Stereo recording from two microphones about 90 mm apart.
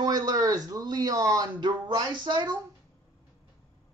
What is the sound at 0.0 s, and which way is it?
Speech, 45° right (ahead or behind).